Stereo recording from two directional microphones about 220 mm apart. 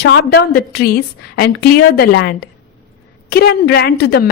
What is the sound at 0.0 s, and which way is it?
A woman's voice, 50° left (ahead or behind).